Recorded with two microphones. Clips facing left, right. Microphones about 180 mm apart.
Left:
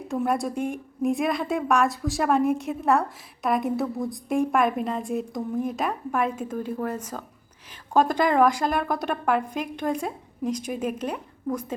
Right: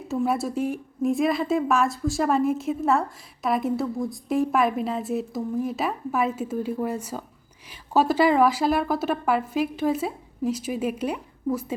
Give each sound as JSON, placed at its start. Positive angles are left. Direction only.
{"t": 0.1, "sound": "speech", "side_deg": -5}